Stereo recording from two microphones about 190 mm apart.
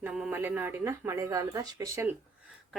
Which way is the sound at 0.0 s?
5° right (ahead or behind).